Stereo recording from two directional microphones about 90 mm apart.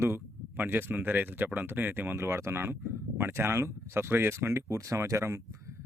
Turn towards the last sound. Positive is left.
turn(degrees=-35)  # may be behind; listen again after turning